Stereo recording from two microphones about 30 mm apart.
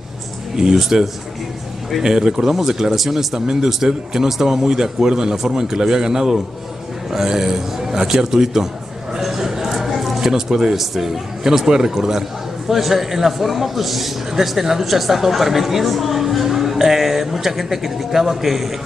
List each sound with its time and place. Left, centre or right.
0.7 s a man's voice: centre
2.0 s a man's voice: right
9.2 s a sound: centre
10.8 s a man's voice: centre